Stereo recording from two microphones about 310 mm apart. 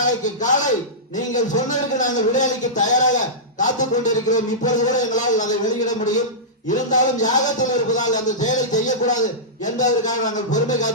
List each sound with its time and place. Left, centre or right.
0.0 s a man's voice: left